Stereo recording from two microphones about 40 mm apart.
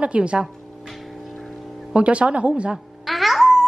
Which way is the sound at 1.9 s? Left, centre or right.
Right.